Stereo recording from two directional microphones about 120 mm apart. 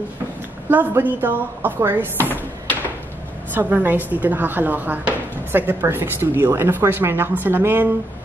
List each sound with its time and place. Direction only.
0.7 s speech: 15° right (ahead or behind)
3.5 s speech: 15° right (ahead or behind)